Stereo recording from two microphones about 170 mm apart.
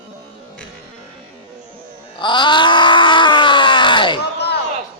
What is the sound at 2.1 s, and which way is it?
Groan, 25° left (ahead or behind).